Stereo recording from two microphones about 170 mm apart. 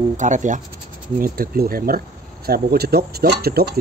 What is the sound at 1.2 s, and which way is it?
Speech, 60° right (ahead or behind).